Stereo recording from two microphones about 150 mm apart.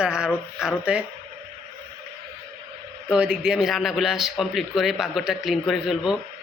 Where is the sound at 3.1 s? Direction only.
5° right (ahead or behind).